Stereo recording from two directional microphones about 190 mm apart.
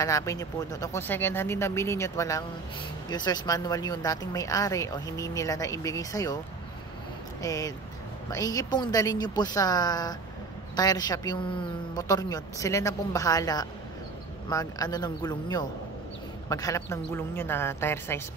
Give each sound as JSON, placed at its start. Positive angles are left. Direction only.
{"t": 0.0, "sound": "speech", "side_deg": 15}
{"t": 7.4, "sound": "a woman's voice", "side_deg": 20}